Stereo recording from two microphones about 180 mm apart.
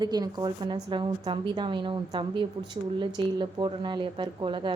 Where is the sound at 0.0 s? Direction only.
25° right (ahead or behind).